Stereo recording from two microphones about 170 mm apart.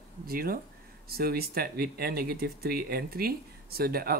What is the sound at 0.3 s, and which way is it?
Speech, 60° right (ahead or behind).